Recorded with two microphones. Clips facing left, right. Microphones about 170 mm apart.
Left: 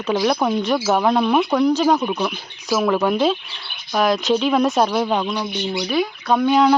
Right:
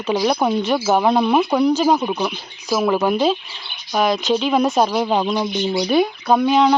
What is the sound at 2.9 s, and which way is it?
Speech, centre (ahead or behind).